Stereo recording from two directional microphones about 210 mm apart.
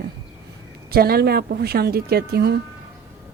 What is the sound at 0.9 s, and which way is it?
Speech, 45° right (ahead or behind).